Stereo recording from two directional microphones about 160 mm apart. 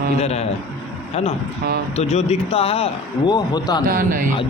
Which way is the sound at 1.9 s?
40° left (ahead or behind).